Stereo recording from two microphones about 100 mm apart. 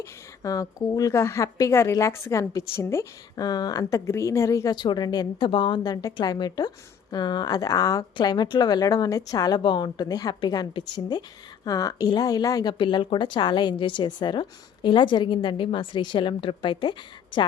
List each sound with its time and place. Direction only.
0.0 s a woman's voice: 35° left (ahead or behind)
3.3 s speech: 40° left (ahead or behind)
5.5 s a woman's voice: 55° left (ahead or behind); by 12.7 s 40° left (ahead or behind)
12.8 s a woman's voice: 55° left (ahead or behind)